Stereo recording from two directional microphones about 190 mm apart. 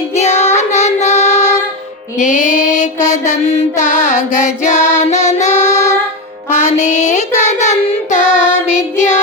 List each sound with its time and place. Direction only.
0.1 s child singing: 35° left (ahead or behind)
2.1 s mantra: 40° left (ahead or behind)
6.5 s child singing: 35° left (ahead or behind)